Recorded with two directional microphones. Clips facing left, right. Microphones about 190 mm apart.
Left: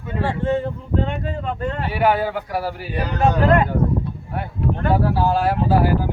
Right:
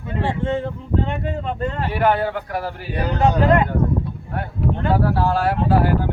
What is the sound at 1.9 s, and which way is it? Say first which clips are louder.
Speech: even; 5° left (ahead or behind).